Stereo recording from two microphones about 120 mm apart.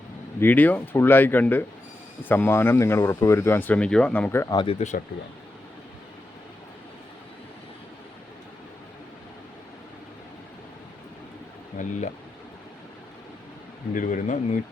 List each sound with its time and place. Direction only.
0.3 s speech: 15° left (ahead or behind)
4.4 s speech: 45° left (ahead or behind)
11.8 s speech: 85° left
13.9 s speech: 90° left